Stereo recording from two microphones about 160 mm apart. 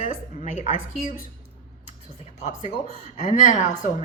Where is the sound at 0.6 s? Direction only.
60° left (ahead or behind).